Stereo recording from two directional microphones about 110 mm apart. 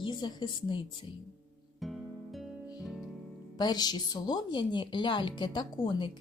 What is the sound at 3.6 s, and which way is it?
A woman's voice, 40° left (ahead or behind).